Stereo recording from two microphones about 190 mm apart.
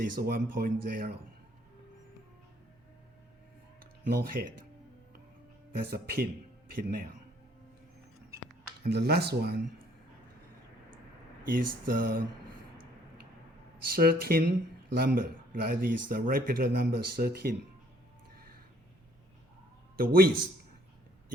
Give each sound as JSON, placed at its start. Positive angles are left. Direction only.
{"t": 0.0, "sound": "speech", "side_deg": -50}
{"t": 4.1, "sound": "speech", "side_deg": -50}
{"t": 5.7, "sound": "speech", "side_deg": -50}
{"t": 8.8, "sound": "speech", "side_deg": -60}
{"t": 11.4, "sound": "speech", "side_deg": -45}
{"t": 13.8, "sound": "speech", "side_deg": -50}
{"t": 20.0, "sound": "speech", "side_deg": -50}